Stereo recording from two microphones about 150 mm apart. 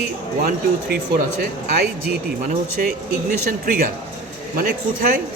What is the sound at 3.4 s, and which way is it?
Speech, 70° right (ahead or behind).